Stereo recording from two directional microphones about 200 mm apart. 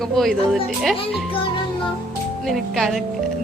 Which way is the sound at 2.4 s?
Centre (ahead or behind).